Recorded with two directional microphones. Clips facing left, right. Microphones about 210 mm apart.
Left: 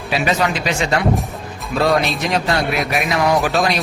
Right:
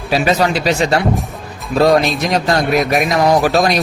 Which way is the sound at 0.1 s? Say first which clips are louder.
Right 4 dB; 40° right (ahead or behind).